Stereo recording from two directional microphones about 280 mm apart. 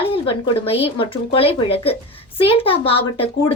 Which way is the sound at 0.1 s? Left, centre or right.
Centre.